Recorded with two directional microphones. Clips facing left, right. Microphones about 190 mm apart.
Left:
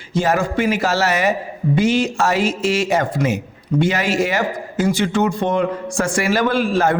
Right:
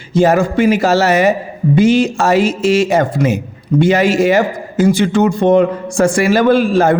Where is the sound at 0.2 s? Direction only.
25° right (ahead or behind).